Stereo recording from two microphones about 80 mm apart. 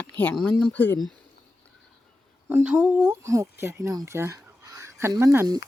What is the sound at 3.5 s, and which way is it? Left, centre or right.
Speech, right.